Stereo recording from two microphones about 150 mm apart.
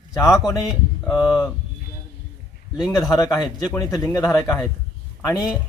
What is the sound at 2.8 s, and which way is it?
A man's voice, 25° left (ahead or behind).